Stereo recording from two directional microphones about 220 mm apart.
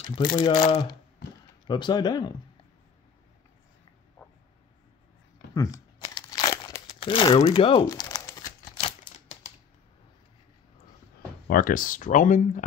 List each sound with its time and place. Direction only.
0.0 s speech: 20° left (ahead or behind)
5.5 s crumpling: 15° left (ahead or behind)
8.7 s typewriter: 25° left (ahead or behind)
11.4 s speech: 40° left (ahead or behind)